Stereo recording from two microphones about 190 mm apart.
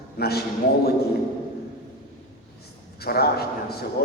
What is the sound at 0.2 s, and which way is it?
Speech, 55° left (ahead or behind).